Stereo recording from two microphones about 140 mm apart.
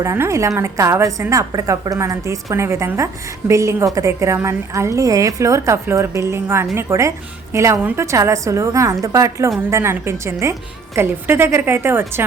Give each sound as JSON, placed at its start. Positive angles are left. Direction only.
{"t": 0.0, "sound": "a woman's voice", "side_deg": -20}